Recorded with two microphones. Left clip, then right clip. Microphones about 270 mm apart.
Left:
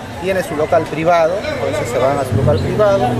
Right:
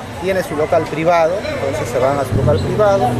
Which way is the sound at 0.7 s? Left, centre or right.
Centre.